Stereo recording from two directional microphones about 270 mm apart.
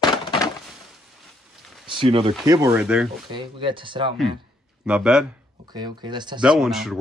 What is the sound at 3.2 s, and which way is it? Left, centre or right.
Speech, centre.